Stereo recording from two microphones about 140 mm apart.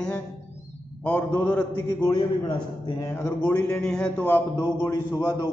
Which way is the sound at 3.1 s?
15° left (ahead or behind).